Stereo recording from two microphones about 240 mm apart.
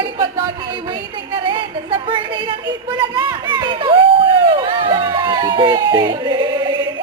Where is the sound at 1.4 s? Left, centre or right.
Right.